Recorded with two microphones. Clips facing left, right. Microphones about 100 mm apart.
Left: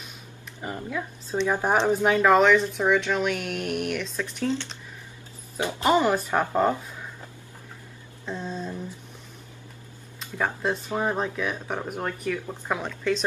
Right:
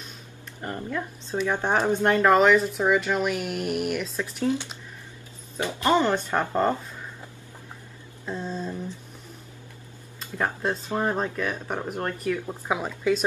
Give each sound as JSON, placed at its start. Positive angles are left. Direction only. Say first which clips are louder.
{"t": 0.6, "sound": "speech", "louder": "right 1 dB", "side_deg": 5}
{"t": 5.6, "sound": "speech", "louder": "even", "side_deg": 20}
{"t": 5.9, "sound": "speech", "louder": "left 1 dB", "side_deg": 10}
{"t": 8.3, "sound": "speech", "louder": "right 1 dB", "side_deg": 0}
{"t": 10.3, "sound": "speech", "louder": "even", "side_deg": 0}